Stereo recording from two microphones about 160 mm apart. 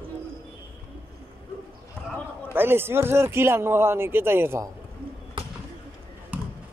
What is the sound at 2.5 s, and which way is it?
A man's voice, 15° right (ahead or behind).